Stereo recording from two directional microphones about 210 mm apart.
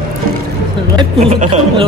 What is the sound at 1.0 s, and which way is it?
Speech, 30° right (ahead or behind).